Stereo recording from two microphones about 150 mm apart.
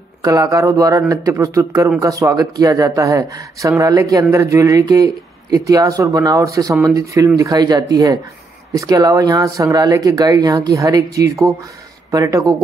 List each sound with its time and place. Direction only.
0.2 s speech: 20° right (ahead or behind)